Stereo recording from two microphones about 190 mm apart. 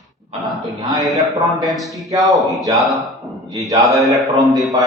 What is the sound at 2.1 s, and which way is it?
Speech, 20° right (ahead or behind).